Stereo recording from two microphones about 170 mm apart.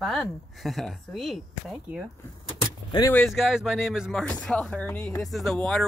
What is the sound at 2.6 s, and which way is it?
Vehicle, 20° left (ahead or behind).